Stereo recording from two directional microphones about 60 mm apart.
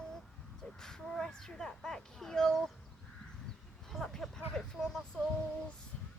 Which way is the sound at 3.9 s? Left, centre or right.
Centre.